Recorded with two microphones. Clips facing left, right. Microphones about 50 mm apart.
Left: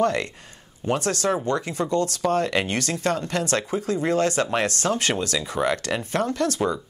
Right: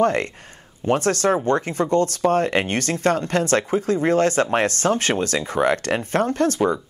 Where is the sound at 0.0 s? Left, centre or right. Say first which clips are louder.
Right 3 dB; right.